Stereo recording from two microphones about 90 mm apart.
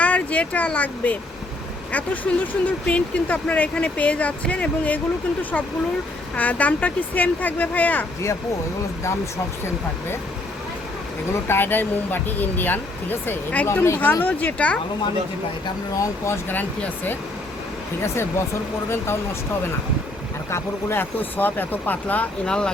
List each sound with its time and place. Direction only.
0.0 s speech: 15° left (ahead or behind)
11.3 s speech: 25° left (ahead or behind)
16.0 s speech: 30° left (ahead or behind)
16.6 s speech: 20° left (ahead or behind)
18.0 s speech: 30° left (ahead or behind)
20.5 s speech: 25° left (ahead or behind); by 22.7 s 10° left (ahead or behind)